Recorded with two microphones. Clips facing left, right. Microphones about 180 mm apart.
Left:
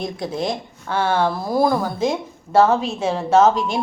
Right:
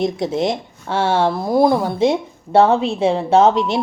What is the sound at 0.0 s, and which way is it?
A woman's voice, 20° right (ahead or behind).